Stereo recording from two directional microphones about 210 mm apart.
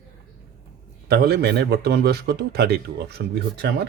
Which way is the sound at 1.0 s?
50° right (ahead or behind).